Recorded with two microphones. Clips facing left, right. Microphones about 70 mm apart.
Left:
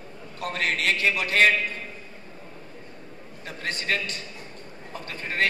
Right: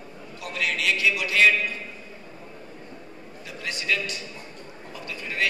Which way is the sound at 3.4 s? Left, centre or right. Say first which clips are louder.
Even; left.